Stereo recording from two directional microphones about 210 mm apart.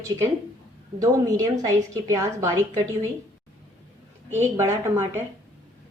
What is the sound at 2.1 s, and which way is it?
Speech, 15° right (ahead or behind).